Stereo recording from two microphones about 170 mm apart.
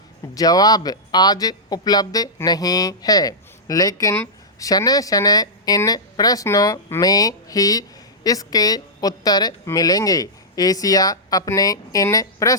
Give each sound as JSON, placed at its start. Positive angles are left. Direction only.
{"t": 0.3, "sound": "speech", "side_deg": 20}